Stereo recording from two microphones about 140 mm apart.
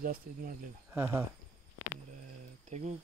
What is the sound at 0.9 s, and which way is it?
Speech, 10° right (ahead or behind).